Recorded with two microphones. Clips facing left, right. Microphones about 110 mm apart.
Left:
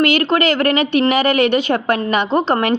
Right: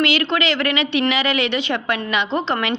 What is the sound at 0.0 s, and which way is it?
A woman's voice, 45° left (ahead or behind).